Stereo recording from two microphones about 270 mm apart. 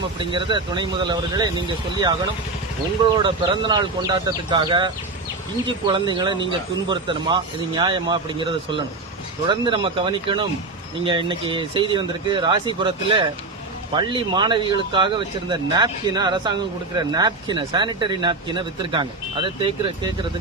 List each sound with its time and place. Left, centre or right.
0.3 s speech: centre
3.2 s speech: centre